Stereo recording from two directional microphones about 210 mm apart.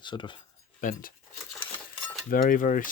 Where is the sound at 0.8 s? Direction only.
40° left (ahead or behind).